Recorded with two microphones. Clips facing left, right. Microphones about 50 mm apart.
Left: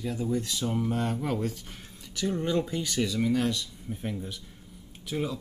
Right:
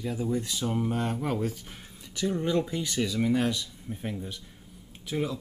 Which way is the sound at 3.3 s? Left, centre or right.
Centre.